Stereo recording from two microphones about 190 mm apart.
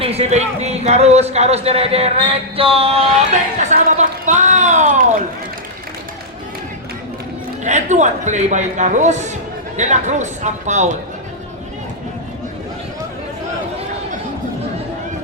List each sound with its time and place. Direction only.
0.0 s speech: 35° right (ahead or behind)
3.6 s a sound: 40° right (ahead or behind)
7.6 s speech: 40° right (ahead or behind)